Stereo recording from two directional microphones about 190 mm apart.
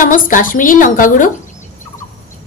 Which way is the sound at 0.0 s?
45° left (ahead or behind).